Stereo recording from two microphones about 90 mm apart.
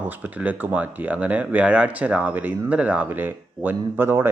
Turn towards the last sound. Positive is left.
turn(degrees=-25)  # may be behind; listen again after turning